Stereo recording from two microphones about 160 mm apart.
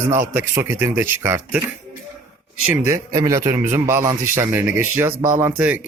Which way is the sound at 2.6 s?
10° right (ahead or behind).